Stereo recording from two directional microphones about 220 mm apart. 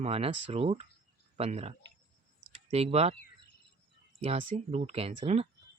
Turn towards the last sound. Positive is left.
turn(degrees=-25)  # may be behind; listen again after turning